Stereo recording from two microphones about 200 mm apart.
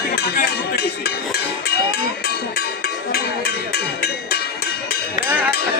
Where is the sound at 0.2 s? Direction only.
55° left (ahead or behind).